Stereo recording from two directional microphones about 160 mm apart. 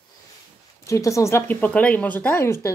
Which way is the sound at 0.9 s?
20° left (ahead or behind).